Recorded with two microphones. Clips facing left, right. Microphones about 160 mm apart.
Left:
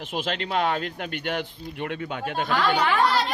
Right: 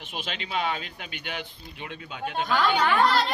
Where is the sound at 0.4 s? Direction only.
55° left (ahead or behind).